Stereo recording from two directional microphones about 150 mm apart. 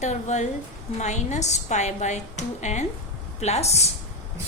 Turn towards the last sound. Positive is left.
turn(degrees=45)  # may be behind; listen again after turning